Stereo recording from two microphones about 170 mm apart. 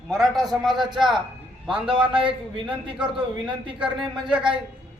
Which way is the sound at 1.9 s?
30° right (ahead or behind).